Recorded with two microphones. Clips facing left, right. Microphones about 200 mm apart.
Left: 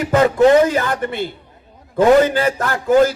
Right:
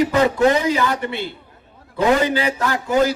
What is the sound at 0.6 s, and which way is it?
A man's voice, 50° left (ahead or behind).